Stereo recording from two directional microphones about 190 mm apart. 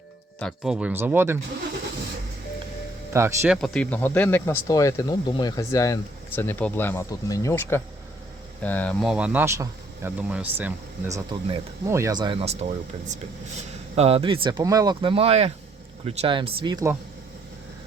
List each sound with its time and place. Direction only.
0.3 s speech: centre (ahead or behind)
3.1 s speech: 15° right (ahead or behind)
3.4 s speech: centre (ahead or behind)
11.1 s speech: 25° right (ahead or behind)